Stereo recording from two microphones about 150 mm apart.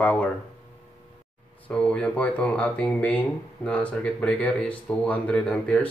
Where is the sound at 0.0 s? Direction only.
10° left (ahead or behind).